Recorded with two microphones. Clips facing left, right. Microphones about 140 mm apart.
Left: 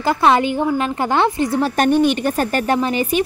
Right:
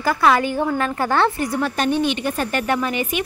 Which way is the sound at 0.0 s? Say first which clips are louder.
Left 2 dB; 25° left (ahead or behind).